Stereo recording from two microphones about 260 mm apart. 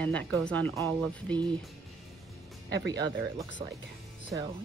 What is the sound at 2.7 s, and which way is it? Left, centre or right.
Speech, right.